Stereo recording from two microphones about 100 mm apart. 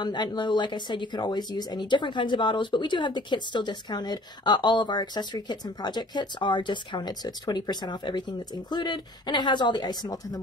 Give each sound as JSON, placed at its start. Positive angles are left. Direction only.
{"t": 0.0, "sound": "speech", "side_deg": 45}